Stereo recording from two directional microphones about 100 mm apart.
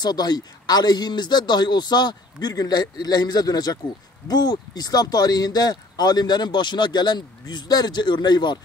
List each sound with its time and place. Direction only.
0.0 s speech: 45° left (ahead or behind)